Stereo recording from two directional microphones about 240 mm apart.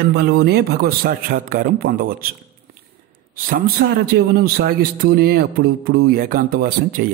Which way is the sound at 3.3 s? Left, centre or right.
Right.